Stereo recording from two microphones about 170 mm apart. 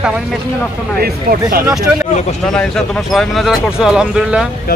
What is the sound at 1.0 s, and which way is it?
Speech, 60° right (ahead or behind).